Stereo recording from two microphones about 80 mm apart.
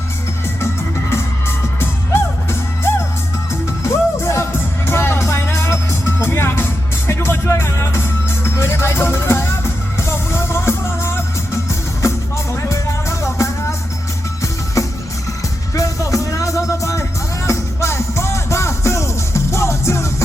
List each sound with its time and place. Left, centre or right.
0.6 s music: left
14.8 s music: left